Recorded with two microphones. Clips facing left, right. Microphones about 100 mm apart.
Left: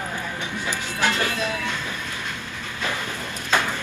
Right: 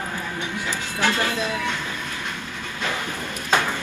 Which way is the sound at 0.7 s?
15° left (ahead or behind).